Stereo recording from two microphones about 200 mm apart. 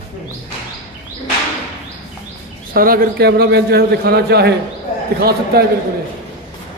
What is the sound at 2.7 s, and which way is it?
A man's voice, 45° right (ahead or behind).